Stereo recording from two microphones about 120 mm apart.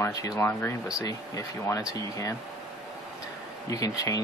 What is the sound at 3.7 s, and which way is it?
Speech, 30° left (ahead or behind).